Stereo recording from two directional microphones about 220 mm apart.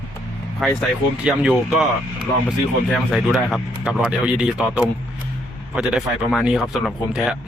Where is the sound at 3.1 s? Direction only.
Centre (ahead or behind).